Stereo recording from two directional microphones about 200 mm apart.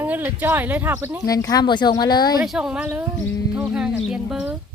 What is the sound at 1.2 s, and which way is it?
Speech, 20° left (ahead or behind).